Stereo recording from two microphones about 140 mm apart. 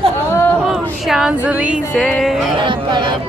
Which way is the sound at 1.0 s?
5° right (ahead or behind).